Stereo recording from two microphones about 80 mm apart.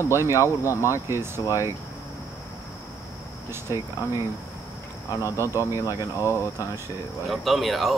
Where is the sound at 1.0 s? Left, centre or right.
Right.